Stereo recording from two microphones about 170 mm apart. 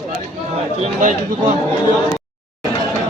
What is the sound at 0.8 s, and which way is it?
Speech, 50° right (ahead or behind).